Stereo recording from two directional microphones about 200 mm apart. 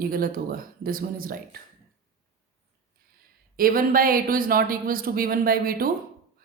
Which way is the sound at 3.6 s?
45° right (ahead or behind).